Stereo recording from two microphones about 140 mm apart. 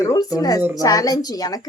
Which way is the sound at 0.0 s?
25° left (ahead or behind).